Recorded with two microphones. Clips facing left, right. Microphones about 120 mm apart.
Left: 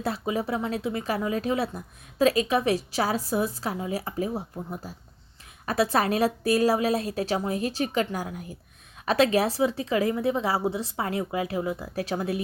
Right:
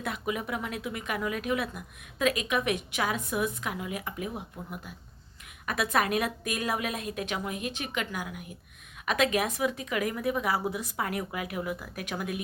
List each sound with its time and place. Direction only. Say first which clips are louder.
0.0 s a woman's voice: left 5 dB; 30° left (ahead or behind)